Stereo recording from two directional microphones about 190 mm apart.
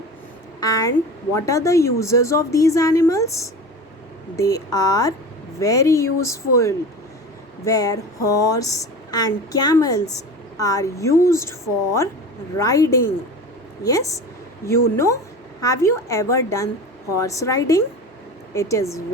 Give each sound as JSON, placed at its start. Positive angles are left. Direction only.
{"t": 0.6, "sound": "a woman's voice", "side_deg": 20}
{"t": 12.5, "sound": "a woman's voice", "side_deg": 15}